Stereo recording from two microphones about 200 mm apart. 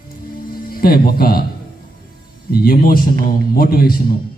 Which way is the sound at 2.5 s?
50° left (ahead or behind).